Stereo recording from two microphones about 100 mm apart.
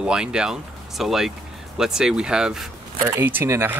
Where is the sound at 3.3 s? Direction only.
25° right (ahead or behind).